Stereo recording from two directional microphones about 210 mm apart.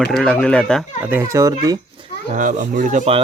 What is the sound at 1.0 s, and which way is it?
Speech, 10° right (ahead or behind).